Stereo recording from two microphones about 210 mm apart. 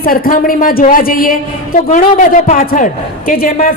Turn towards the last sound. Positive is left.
turn(degrees=40)  # may be behind; listen again after turning